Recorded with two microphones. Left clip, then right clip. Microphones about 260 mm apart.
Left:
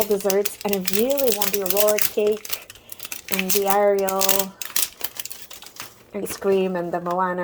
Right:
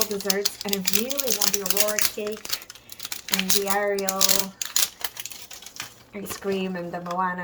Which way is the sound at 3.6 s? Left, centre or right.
Centre.